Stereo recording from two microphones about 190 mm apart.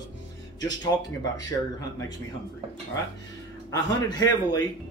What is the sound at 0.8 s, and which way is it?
Speech, 20° left (ahead or behind).